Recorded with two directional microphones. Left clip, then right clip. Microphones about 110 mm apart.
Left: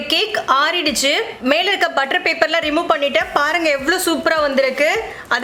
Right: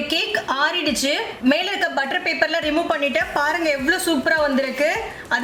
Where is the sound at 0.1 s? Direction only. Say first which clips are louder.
Left 8 dB; 40° left (ahead or behind).